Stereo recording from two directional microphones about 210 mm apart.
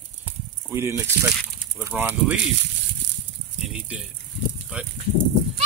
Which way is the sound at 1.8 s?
10° right (ahead or behind).